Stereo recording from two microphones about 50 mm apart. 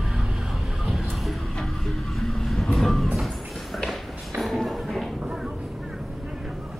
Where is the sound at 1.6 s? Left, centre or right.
Centre.